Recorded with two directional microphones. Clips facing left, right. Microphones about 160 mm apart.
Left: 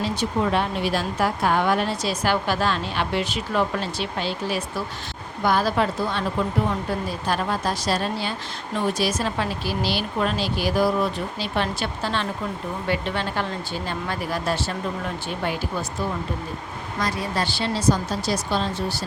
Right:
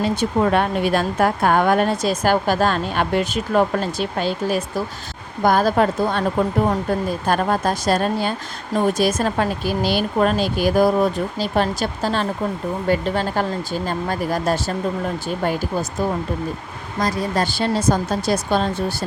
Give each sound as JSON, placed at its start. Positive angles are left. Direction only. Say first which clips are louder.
{"t": 0.0, "sound": "speech", "louder": "right 5 dB", "side_deg": -55}